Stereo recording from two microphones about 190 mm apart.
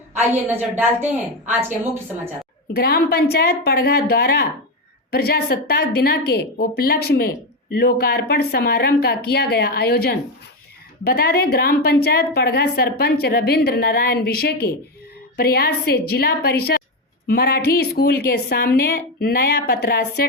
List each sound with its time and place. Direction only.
0.4 s a woman's voice: 10° right (ahead or behind)
2.7 s a woman's voice: 55° left (ahead or behind)